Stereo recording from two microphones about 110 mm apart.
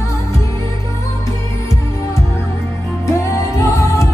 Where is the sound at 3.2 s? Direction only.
25° left (ahead or behind).